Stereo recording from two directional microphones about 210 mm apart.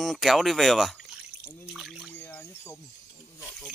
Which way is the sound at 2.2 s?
10° left (ahead or behind).